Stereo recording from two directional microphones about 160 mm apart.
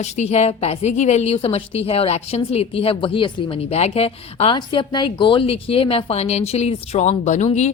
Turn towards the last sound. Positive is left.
turn(degrees=45)  # may be behind; listen again after turning